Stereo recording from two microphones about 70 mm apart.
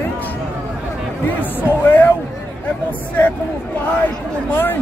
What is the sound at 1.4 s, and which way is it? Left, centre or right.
Speech, left.